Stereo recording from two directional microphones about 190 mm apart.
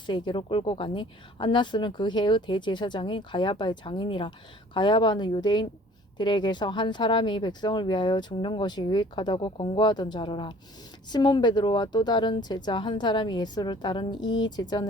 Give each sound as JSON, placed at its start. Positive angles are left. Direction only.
{"t": 0.1, "sound": "a woman's voice", "side_deg": 25}